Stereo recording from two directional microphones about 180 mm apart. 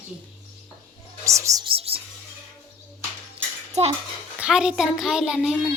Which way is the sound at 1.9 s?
35° right (ahead or behind).